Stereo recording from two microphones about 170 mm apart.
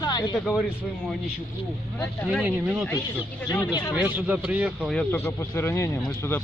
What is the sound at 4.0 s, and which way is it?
Speech, 10° right (ahead or behind).